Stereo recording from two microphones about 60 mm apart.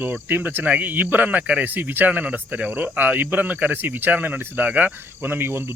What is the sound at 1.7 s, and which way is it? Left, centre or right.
Speech, right.